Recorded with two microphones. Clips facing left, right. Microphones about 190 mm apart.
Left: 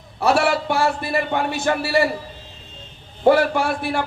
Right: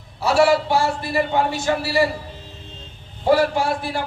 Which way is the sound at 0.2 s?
55° left (ahead or behind).